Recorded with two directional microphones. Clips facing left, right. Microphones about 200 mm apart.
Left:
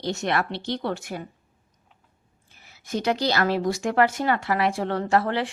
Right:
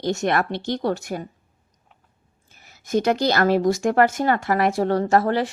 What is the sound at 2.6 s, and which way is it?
Speech, 45° right (ahead or behind).